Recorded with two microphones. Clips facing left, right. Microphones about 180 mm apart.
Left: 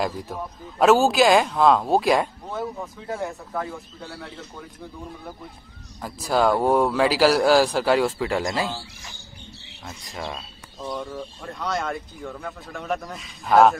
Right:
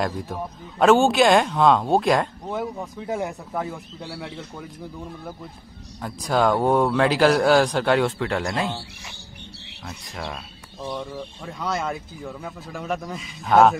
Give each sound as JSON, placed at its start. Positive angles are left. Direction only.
{"t": 0.0, "sound": "speech", "side_deg": 0}
{"t": 2.5, "sound": "speech", "side_deg": -15}
{"t": 5.9, "sound": "speech", "side_deg": 5}
{"t": 9.8, "sound": "speech", "side_deg": 0}